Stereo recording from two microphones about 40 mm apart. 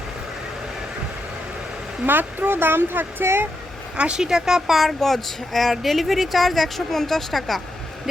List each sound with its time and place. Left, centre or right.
2.0 s speech: right
3.9 s speech: right
4.2 s speech: centre
4.8 s speech: centre